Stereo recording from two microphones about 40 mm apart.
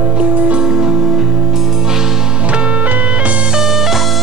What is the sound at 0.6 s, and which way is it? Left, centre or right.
Music, centre.